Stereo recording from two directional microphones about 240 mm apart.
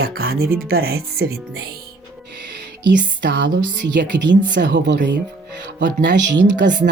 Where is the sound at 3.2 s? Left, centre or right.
Right.